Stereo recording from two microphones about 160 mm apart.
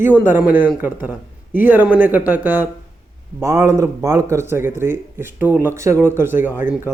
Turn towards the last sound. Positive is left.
turn(degrees=-15)  # may be behind; listen again after turning